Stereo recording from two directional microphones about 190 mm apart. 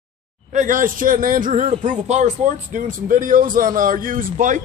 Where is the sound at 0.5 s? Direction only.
40° right (ahead or behind).